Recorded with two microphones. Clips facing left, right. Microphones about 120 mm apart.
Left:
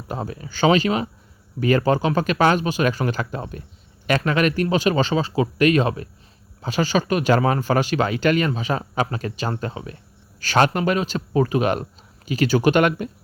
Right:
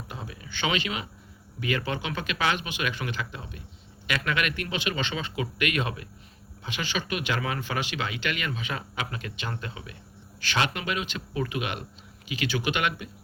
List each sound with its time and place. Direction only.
0.1 s speech: 40° left (ahead or behind)